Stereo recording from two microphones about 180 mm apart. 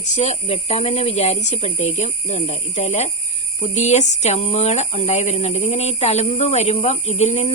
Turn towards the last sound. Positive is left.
turn(degrees=35)  # may be behind; listen again after turning